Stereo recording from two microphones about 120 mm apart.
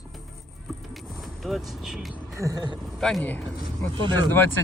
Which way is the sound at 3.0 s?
5° left (ahead or behind).